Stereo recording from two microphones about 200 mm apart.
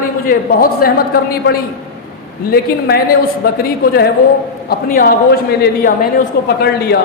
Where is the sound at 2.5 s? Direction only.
50° left (ahead or behind).